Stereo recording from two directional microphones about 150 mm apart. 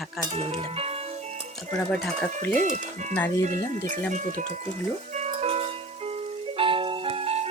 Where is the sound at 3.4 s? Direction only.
50° right (ahead or behind).